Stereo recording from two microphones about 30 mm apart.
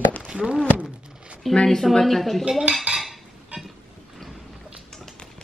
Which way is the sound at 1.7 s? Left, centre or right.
Centre.